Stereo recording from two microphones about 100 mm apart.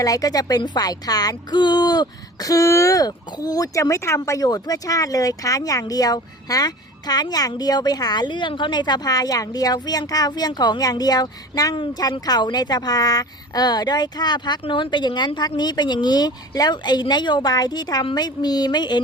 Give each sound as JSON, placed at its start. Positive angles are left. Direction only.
{"t": 0.0, "sound": "speech", "side_deg": 35}